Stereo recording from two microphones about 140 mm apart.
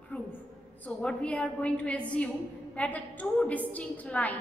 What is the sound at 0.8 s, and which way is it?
A woman's voice, 10° left (ahead or behind).